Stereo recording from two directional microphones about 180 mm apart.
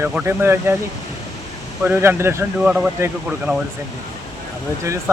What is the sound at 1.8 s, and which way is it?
Speech, 10° right (ahead or behind).